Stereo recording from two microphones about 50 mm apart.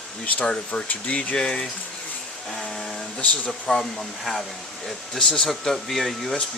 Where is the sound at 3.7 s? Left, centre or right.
Centre.